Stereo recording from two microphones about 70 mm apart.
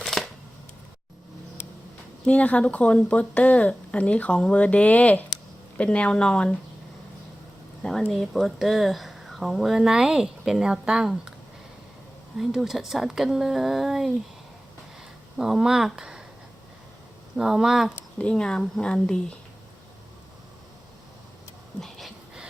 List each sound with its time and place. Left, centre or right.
0.0 s a sound: centre
2.2 s speech: centre
7.8 s speech: centre
12.4 s speech: centre
15.4 s speech: centre
17.3 s speech: centre
18.2 s speech: centre
21.8 s a sound: centre